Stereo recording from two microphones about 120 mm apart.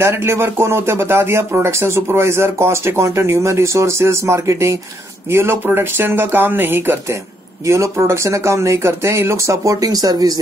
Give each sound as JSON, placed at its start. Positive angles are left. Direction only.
{"t": 0.0, "sound": "speech", "side_deg": -20}